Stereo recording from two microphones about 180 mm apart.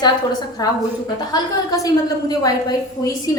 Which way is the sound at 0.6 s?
20° left (ahead or behind).